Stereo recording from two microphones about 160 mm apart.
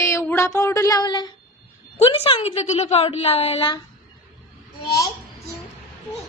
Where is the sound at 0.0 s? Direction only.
15° left (ahead or behind).